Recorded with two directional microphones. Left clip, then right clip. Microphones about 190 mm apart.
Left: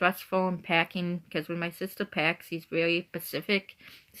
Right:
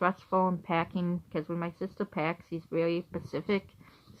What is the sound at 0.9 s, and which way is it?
Speech, 25° left (ahead or behind).